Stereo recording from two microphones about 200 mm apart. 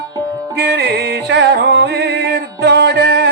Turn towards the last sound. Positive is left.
turn(degrees=-55)  # may be behind; listen again after turning